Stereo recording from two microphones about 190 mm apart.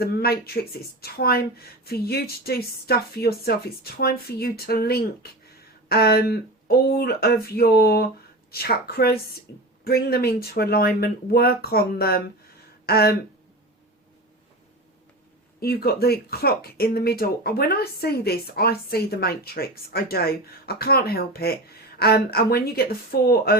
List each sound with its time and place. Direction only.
0.0 s speech: 55° left (ahead or behind)
12.8 s a sound: 55° left (ahead or behind)
15.6 s speech: 55° left (ahead or behind)